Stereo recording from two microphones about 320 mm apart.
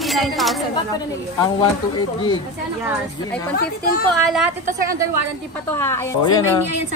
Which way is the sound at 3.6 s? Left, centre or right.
Left.